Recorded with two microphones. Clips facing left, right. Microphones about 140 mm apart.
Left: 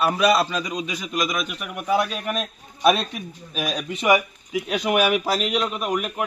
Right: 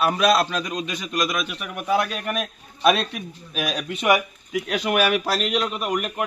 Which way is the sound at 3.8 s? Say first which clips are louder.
Left 1 dB; 10° left (ahead or behind).